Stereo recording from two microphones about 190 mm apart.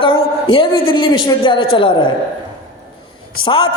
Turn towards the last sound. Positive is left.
turn(degrees=25)  # may be behind; listen again after turning